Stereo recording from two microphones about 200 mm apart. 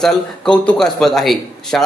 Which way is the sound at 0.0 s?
5° left (ahead or behind).